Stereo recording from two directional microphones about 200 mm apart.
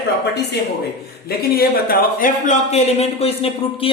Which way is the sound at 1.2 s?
50° left (ahead or behind).